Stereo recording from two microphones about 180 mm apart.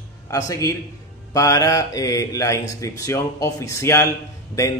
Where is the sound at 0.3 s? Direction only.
20° left (ahead or behind).